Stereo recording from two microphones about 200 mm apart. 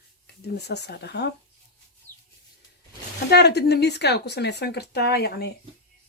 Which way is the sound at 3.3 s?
55° left (ahead or behind).